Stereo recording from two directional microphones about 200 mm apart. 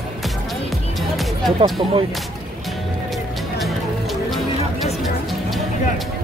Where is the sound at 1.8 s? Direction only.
25° right (ahead or behind).